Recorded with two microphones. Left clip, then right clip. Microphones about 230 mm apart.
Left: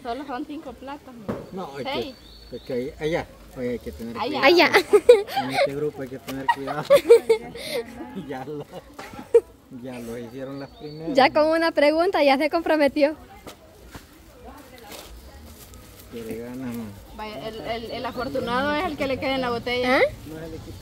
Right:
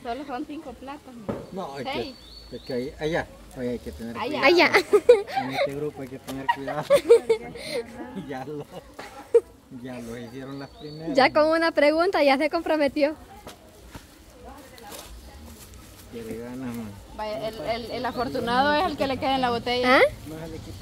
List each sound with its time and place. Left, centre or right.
0.3 s speech: left
1.6 s speech: centre
1.9 s speech: left
2.7 s speech: centre
4.1 s speech: left
4.4 s speech: centre
5.2 s speech: left
5.5 s speech: centre
10.1 s speech: centre
17.2 s speech: right
19.8 s speech: centre